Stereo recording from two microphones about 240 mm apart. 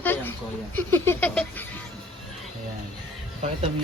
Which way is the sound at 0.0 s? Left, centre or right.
Centre.